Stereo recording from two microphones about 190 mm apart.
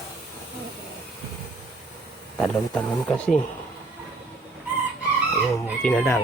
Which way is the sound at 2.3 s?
5° left (ahead or behind).